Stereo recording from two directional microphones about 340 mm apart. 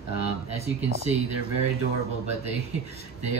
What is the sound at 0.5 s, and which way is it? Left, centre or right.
Speech, centre.